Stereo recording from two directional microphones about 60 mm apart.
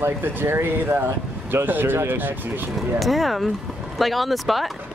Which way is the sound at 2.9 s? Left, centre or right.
Centre.